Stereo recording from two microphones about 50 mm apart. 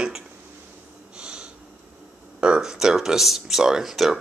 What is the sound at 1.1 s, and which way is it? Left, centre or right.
Snort, centre.